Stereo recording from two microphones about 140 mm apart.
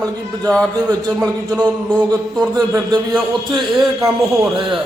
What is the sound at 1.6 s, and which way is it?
Speech, 10° left (ahead or behind).